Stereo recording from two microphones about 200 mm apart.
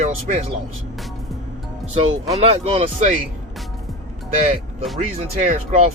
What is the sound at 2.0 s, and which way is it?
Speech, 30° right (ahead or behind).